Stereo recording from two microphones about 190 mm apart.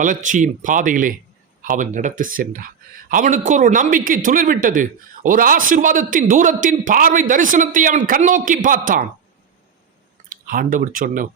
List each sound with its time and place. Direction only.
0.0 s speech: 40° right (ahead or behind)
10.2 s speech: 45° right (ahead or behind)